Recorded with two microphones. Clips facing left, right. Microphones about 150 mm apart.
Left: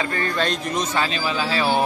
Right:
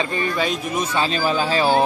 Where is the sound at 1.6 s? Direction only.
30° right (ahead or behind).